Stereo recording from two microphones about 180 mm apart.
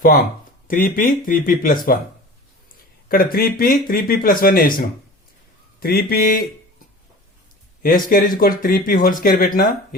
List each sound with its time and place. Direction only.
0.7 s speech: 50° left (ahead or behind)
3.1 s speech: 55° left (ahead or behind)
7.8 s speech: 50° left (ahead or behind)